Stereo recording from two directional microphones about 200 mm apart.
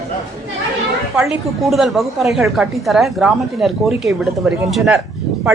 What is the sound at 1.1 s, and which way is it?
A woman's voice, 5° right (ahead or behind).